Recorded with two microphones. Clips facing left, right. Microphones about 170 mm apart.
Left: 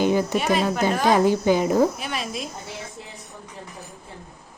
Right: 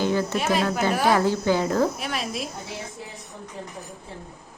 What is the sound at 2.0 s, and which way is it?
Speech, centre (ahead or behind).